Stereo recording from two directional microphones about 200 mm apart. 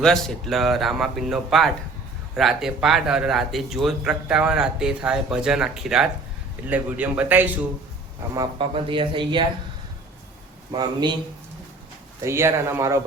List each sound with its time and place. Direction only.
0.0 s a man's voice: centre (ahead or behind)
8.4 s speech: 25° right (ahead or behind)
10.7 s speech: 20° right (ahead or behind)
12.2 s a man's voice: 15° right (ahead or behind)